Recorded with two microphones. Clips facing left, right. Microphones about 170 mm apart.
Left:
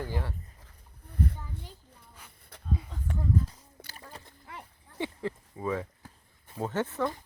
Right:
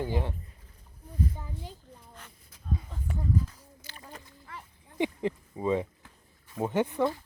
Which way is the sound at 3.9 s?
65° left (ahead or behind).